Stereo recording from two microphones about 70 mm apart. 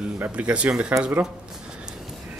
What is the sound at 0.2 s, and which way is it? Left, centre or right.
Speech, centre.